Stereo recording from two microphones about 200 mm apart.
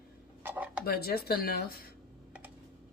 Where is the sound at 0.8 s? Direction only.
50° left (ahead or behind).